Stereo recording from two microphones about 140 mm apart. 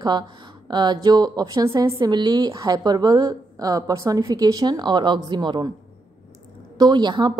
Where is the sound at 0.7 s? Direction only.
30° right (ahead or behind).